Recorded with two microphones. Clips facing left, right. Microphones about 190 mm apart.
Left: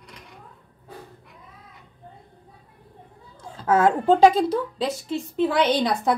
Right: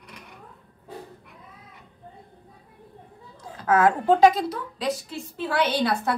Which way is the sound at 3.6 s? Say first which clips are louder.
Left 1 dB; 25° left (ahead or behind).